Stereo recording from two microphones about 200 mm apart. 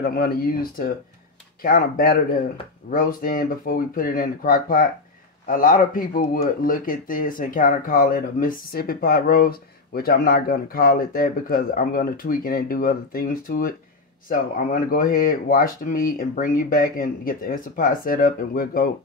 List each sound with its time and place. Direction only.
0.0 s speech: 50° left (ahead or behind)